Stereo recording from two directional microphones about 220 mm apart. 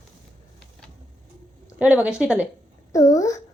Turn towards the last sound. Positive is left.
turn(degrees=15)  # may be behind; listen again after turning